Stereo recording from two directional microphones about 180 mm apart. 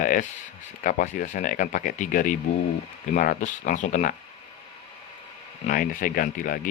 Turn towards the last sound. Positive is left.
turn(degrees=50)  # may be behind; listen again after turning